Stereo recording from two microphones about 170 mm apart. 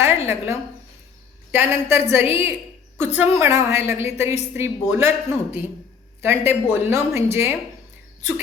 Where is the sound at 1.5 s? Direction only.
15° right (ahead or behind).